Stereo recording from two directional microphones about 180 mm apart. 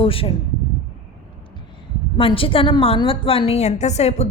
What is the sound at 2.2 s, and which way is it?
A woman's voice, 30° left (ahead or behind).